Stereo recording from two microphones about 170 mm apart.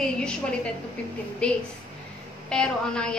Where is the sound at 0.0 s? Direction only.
5° left (ahead or behind).